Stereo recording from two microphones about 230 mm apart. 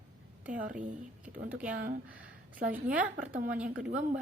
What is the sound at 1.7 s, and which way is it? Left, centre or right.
Speech, right.